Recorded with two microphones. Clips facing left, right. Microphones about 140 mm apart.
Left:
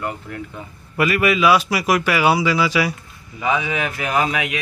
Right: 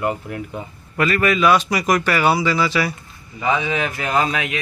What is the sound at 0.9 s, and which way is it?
A man's voice, 10° left (ahead or behind).